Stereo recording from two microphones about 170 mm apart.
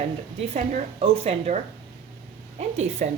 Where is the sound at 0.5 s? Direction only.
40° right (ahead or behind).